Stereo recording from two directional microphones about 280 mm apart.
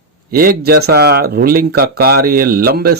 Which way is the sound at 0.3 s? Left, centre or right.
Right.